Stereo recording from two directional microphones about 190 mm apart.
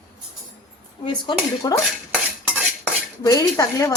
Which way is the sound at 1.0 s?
25° left (ahead or behind).